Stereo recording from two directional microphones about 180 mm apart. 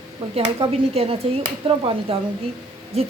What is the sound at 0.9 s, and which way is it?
Speech, 35° right (ahead or behind).